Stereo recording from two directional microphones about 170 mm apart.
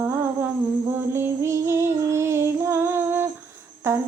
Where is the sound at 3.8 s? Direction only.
15° right (ahead or behind).